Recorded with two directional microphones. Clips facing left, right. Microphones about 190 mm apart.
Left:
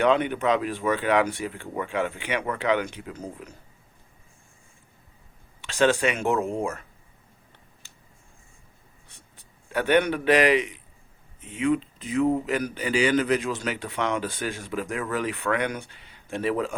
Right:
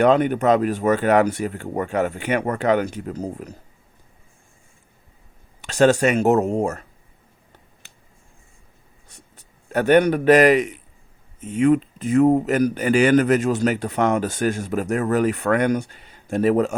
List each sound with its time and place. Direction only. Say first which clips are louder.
0.0 s speech: right 5 dB; 45° right (ahead or behind)
5.6 s speech: right 6 dB; 40° right (ahead or behind)
9.0 s a man's voice: right 6 dB; 40° right (ahead or behind)